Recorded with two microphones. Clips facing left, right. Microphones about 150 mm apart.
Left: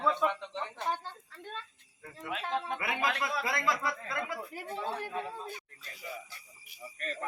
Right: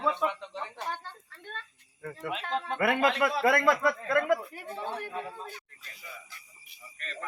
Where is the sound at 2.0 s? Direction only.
70° right (ahead or behind).